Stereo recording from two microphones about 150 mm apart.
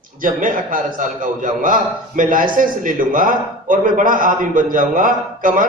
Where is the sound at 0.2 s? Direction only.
65° right (ahead or behind).